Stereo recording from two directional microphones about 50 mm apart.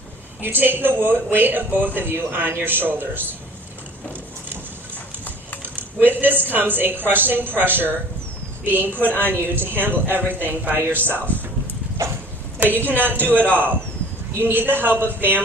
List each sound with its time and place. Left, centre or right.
0.4 s a man's voice: right
5.7 s a man's voice: right
12.0 s a sound: right
12.5 s a woman's voice: right